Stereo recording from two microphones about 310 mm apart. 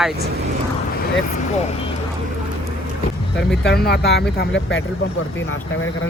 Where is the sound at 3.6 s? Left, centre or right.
Left.